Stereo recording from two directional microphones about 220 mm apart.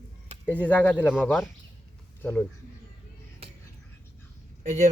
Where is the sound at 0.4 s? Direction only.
5° left (ahead or behind).